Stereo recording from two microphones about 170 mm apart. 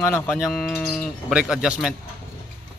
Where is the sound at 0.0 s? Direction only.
10° left (ahead or behind).